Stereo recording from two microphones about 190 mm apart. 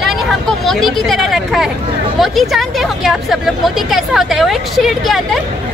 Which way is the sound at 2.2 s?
Centre (ahead or behind).